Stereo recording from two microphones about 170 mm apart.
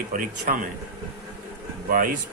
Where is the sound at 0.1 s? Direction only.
50° right (ahead or behind).